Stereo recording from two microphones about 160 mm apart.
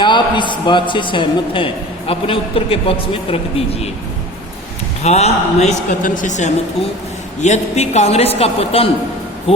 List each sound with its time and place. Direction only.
0.0 s a man's voice: 30° left (ahead or behind)
5.0 s a man's voice: 40° left (ahead or behind)